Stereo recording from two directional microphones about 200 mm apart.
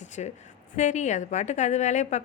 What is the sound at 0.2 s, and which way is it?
A woman's voice, 35° left (ahead or behind).